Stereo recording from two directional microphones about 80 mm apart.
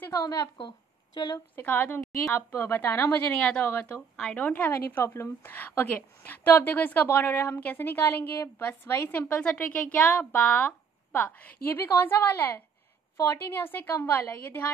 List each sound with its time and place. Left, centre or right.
0.1 s a woman's voice: left
0.6 s speech: left
1.5 s a woman's voice: left